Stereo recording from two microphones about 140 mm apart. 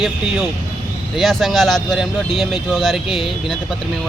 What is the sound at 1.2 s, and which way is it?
Speech, centre (ahead or behind).